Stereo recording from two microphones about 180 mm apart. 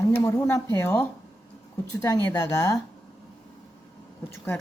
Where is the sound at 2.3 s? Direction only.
15° left (ahead or behind).